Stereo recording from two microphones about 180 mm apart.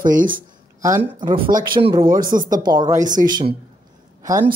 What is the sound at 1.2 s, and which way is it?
Speech, 25° right (ahead or behind).